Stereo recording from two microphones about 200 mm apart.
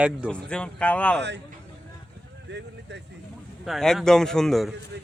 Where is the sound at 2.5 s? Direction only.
60° right (ahead or behind).